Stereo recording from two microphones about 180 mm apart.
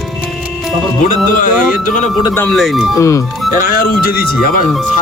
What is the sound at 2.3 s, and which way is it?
Speech, 5° left (ahead or behind).